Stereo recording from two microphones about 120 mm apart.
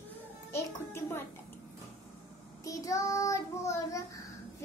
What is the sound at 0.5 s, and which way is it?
Music, 20° left (ahead or behind).